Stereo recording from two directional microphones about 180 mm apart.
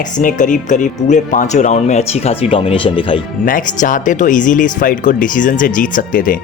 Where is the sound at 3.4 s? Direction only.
50° left (ahead or behind).